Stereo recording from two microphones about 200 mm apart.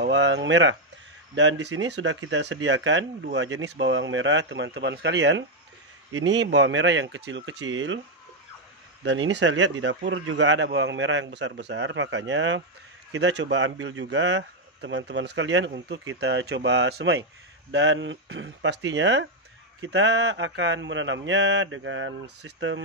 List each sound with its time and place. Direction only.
0.0 s speech: 60° right (ahead or behind)
9.0 s speech: 65° right (ahead or behind)